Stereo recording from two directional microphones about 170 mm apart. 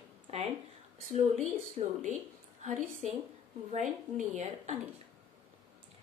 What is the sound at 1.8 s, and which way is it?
A woman's voice, 40° right (ahead or behind).